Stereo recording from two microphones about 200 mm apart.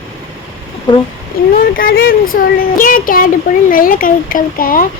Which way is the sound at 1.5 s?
45° left (ahead or behind).